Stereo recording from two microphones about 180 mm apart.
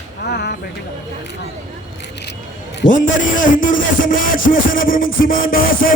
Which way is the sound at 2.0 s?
70° left (ahead or behind).